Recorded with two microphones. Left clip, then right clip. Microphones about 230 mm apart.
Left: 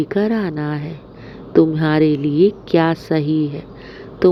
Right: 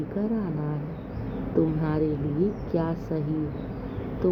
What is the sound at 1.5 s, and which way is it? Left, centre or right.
Speech, left.